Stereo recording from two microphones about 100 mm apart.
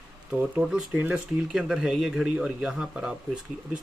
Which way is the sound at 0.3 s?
15° right (ahead or behind).